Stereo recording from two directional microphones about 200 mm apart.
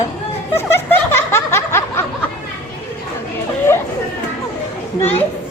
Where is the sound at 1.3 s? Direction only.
15° left (ahead or behind).